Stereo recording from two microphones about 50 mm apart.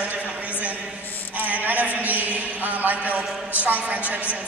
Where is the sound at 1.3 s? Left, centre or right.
Right.